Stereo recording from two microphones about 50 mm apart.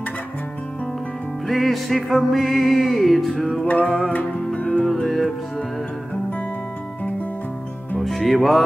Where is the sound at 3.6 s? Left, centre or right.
Left.